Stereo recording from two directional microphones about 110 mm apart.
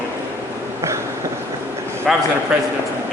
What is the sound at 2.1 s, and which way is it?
Speech, centre (ahead or behind).